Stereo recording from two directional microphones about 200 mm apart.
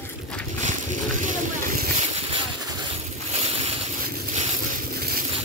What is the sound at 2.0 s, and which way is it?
Boat, 25° right (ahead or behind).